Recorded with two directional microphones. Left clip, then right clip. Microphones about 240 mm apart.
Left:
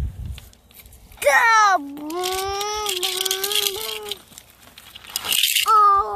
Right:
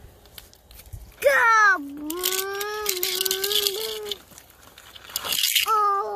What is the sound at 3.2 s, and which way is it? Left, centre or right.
Rattle, left.